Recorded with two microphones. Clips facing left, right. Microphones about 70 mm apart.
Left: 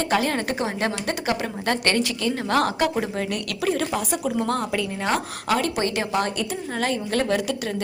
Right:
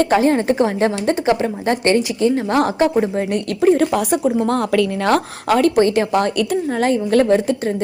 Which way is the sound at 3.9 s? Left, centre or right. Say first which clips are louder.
Right 8 dB; right.